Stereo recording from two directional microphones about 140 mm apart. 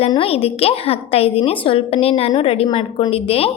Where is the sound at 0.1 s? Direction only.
40° left (ahead or behind).